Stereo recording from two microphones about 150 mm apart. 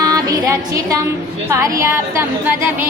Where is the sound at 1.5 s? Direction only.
20° right (ahead or behind).